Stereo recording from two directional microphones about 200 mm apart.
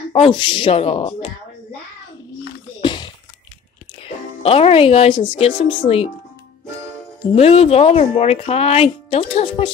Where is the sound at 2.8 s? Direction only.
25° left (ahead or behind).